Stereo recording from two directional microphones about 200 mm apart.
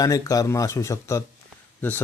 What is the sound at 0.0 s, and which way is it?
Speech, 15° left (ahead or behind).